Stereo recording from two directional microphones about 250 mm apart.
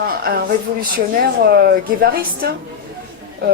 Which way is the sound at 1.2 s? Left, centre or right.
Right.